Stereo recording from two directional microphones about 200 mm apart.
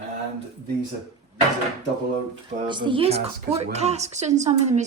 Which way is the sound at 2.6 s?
25° right (ahead or behind).